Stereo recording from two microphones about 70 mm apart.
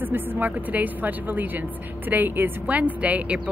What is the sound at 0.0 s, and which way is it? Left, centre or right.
A woman's voice, right.